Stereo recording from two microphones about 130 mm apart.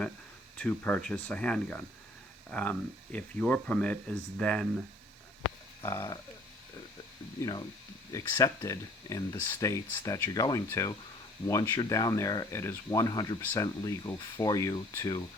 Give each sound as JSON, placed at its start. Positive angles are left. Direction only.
{"t": 0.5, "sound": "speech", "side_deg": 15}
{"t": 5.8, "sound": "speech", "side_deg": 25}
{"t": 8.1, "sound": "speech", "side_deg": 25}